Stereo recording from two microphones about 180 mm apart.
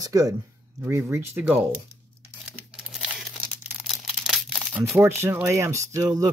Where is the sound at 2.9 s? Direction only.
Centre (ahead or behind).